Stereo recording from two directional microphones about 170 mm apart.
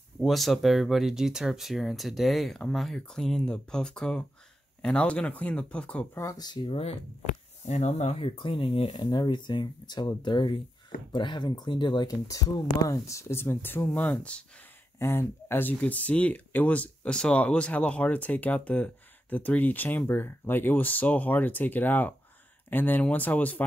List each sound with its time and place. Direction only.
0.2 s speech: centre (ahead or behind)